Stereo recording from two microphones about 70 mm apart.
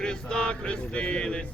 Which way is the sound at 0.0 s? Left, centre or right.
Centre.